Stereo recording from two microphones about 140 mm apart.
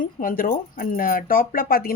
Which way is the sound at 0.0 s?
80° left.